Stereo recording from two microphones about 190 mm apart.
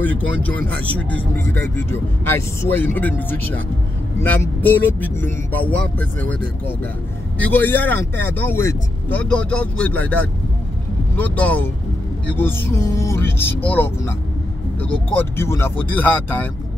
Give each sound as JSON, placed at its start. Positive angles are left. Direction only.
{"t": 0.0, "sound": "speech", "side_deg": 10}
{"t": 7.3, "sound": "speech", "side_deg": 10}
{"t": 11.1, "sound": "speech", "side_deg": 10}